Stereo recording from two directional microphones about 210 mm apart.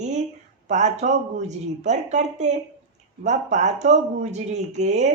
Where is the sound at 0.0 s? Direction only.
35° right (ahead or behind).